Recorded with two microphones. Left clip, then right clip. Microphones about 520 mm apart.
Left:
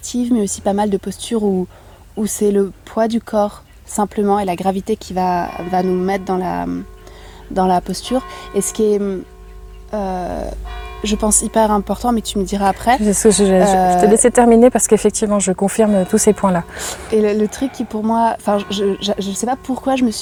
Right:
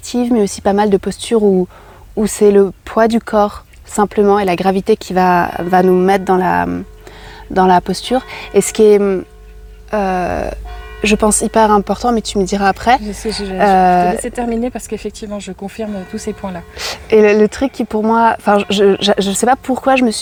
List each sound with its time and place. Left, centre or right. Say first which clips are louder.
0.0 s speech: right 4 dB; right
13.0 s speech: left 9 dB; left
13.6 s speech: right 2 dB; right
14.3 s speech: left 10 dB; left
17.1 s speech: right 7 dB; right